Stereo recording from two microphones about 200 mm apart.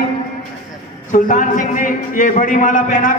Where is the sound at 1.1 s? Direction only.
40° left (ahead or behind).